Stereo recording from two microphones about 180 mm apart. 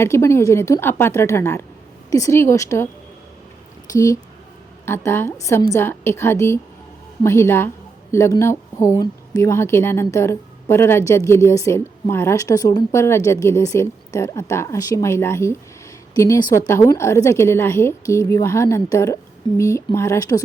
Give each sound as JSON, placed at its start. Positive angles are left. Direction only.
{"t": 0.0, "sound": "a woman's voice", "side_deg": 15}
{"t": 3.9, "sound": "a woman's voice", "side_deg": 15}